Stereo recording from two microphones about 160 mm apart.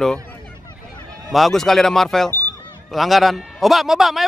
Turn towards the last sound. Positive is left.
turn(degrees=0)  # may be behind; listen again after turning